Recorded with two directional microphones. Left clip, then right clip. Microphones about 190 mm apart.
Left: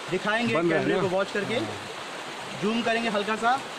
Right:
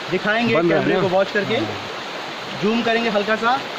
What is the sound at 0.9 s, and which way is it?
Speech, 50° left (ahead or behind).